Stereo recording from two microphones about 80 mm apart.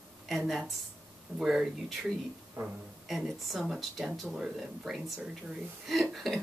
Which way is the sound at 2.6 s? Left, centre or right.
Right.